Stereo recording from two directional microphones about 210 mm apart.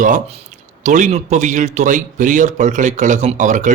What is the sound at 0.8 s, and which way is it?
Speech, 35° right (ahead or behind).